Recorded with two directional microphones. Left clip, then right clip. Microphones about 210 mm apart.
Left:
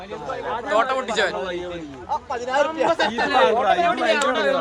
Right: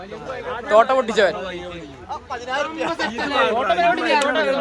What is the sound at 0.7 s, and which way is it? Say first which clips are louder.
Speech: right 6 dB; 5° left (ahead or behind).